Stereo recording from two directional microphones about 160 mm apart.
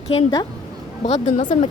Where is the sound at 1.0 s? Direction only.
45° left (ahead or behind).